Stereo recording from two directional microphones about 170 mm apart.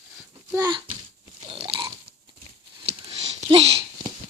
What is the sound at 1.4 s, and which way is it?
Crunch, 35° right (ahead or behind).